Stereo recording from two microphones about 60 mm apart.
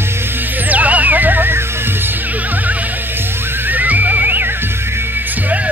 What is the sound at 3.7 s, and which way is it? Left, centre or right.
Music, right.